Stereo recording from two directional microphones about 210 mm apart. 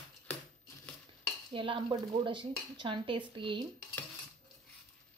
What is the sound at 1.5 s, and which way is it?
Speech, 25° right (ahead or behind).